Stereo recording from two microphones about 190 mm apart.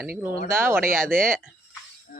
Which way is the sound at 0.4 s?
10° right (ahead or behind).